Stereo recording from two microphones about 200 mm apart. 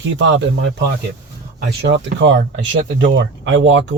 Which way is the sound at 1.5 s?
55° right (ahead or behind).